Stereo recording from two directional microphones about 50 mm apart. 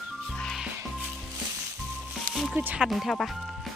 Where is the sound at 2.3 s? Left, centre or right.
Centre.